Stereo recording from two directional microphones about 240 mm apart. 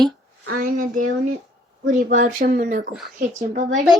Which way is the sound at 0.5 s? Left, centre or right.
Right.